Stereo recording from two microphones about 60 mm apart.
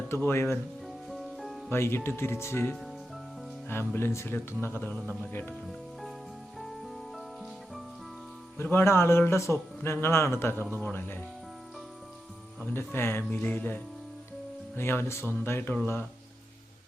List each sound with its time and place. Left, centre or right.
0.2 s speech: left
1.1 s music: centre
1.7 s speech: left
4.4 s speech: left
5.6 s music: centre
8.6 s speech: left
12.7 s speech: left
13.4 s speech: left
14.8 s speech: left